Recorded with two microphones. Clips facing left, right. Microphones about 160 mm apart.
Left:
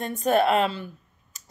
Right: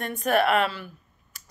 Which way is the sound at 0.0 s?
25° left (ahead or behind).